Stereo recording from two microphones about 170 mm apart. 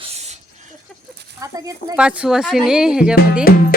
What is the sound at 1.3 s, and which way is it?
Speech, 20° right (ahead or behind).